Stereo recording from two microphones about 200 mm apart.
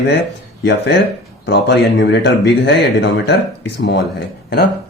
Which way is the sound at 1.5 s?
60° left (ahead or behind).